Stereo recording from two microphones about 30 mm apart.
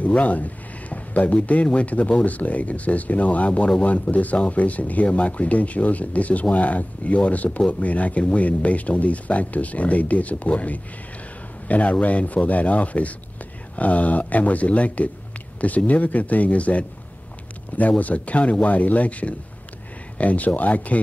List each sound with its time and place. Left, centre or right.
0.0 s speech: left